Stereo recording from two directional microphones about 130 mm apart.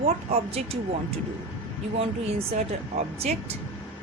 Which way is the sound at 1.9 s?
50° right (ahead or behind).